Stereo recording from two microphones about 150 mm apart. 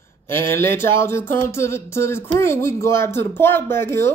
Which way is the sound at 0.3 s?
15° left (ahead or behind).